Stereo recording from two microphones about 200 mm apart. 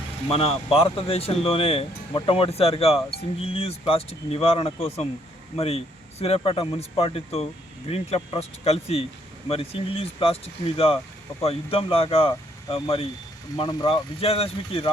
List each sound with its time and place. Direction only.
0.3 s speech: 30° left (ahead or behind)